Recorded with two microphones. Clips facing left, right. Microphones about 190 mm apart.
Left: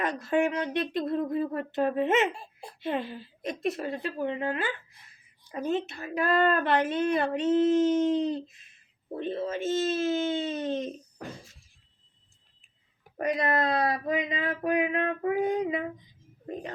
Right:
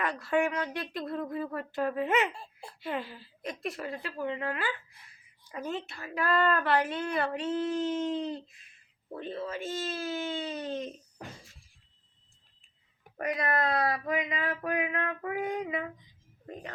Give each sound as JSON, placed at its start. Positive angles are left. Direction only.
{"t": 0.0, "sound": "speech", "side_deg": 20}
{"t": 13.1, "sound": "speech", "side_deg": 25}